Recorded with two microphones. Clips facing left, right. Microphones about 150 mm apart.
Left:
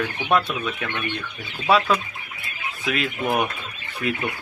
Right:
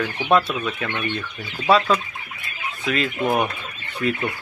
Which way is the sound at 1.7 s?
5° left (ahead or behind).